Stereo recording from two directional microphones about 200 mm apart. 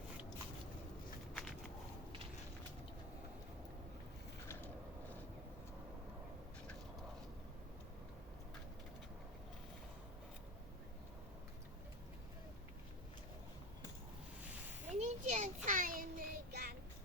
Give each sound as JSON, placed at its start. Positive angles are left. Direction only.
{"t": 1.3, "sound": "walk", "side_deg": 0}
{"t": 14.9, "sound": "child singing", "side_deg": -35}